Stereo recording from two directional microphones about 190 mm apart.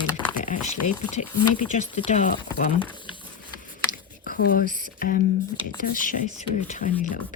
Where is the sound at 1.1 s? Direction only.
40° left (ahead or behind).